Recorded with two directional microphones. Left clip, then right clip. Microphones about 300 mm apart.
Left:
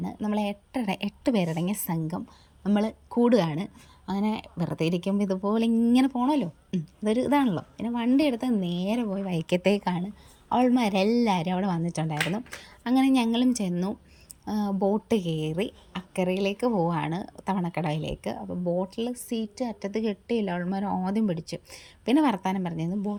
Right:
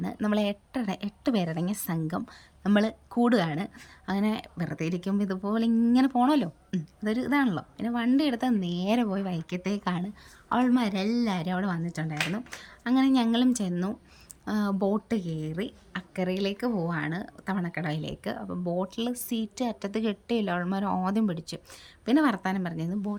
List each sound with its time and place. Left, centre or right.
0.0 s a woman's voice: centre
19.9 s a woman's voice: right
20.7 s speech: centre